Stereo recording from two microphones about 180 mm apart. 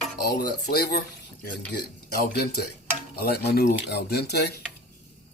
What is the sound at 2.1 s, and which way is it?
Speech, 65° left (ahead or behind).